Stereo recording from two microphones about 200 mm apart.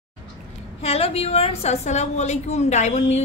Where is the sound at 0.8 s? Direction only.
30° left (ahead or behind).